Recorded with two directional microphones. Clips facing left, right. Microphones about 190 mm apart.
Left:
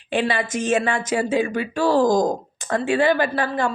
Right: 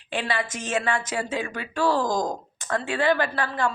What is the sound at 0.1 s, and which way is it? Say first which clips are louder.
Speech: left 6 dB; 20° left (ahead or behind).